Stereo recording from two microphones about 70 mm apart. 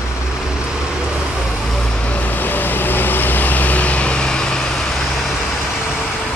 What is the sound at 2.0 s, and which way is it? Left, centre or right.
Vehicle, left.